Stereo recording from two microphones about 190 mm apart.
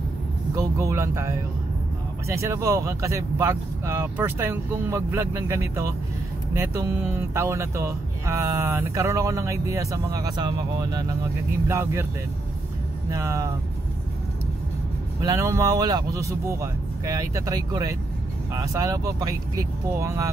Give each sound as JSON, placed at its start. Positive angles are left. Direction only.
{"t": 0.6, "sound": "speech", "side_deg": -15}
{"t": 13.1, "sound": "speech", "side_deg": -15}
{"t": 15.2, "sound": "speech", "side_deg": -15}